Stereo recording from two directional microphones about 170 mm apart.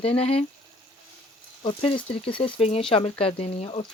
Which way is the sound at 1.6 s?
30° left (ahead or behind).